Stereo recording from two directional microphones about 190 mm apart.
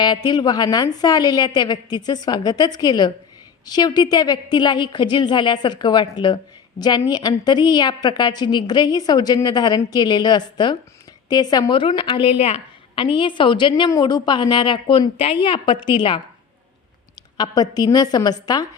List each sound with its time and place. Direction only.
0.0 s a woman's voice: 20° left (ahead or behind)
17.3 s a woman's voice: 20° left (ahead or behind)